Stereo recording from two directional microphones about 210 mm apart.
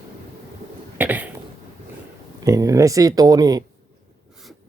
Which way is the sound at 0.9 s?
5° right (ahead or behind).